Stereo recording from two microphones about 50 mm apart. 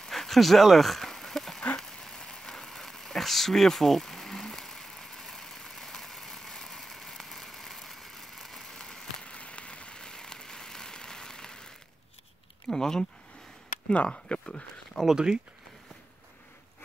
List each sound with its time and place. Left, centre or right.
0.1 s a sound: centre
13.8 s speech: left
15.0 s speech: centre